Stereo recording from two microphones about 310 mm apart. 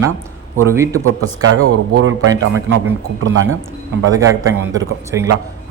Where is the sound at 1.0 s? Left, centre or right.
Right.